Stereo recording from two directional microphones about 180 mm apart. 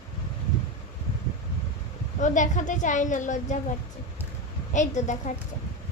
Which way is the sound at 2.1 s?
45° left (ahead or behind).